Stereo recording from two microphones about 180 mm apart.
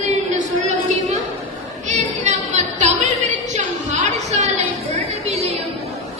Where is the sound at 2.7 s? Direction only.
40° right (ahead or behind).